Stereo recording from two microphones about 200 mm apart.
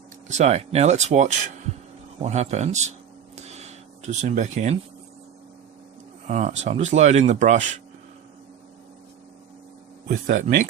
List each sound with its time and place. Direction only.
0.3 s speech: 35° right (ahead or behind)
3.3 s a sound: 35° right (ahead or behind)
6.2 s speech: 35° right (ahead or behind)
10.1 s speech: 40° right (ahead or behind)